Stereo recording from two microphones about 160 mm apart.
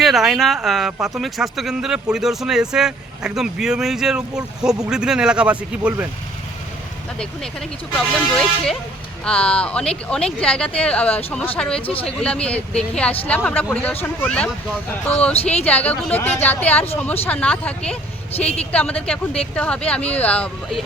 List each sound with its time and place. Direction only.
0.0 s speech: centre (ahead or behind)
7.9 s speech: 5° left (ahead or behind)
15.4 s speech: 40° left (ahead or behind)
15.6 s speech: 10° left (ahead or behind)
18.3 s speech: 40° left (ahead or behind)
18.7 s speech: 5° left (ahead or behind)